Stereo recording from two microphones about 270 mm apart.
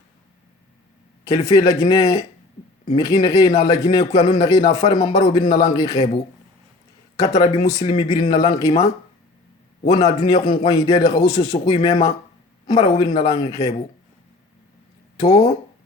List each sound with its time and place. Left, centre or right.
1.3 s a man's voice: centre
7.2 s a man's voice: centre
10.0 s a man's voice: centre